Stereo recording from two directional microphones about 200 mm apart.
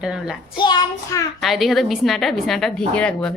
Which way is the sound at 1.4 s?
Centre (ahead or behind).